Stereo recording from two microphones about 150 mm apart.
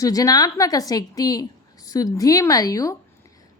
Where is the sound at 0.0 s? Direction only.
25° left (ahead or behind).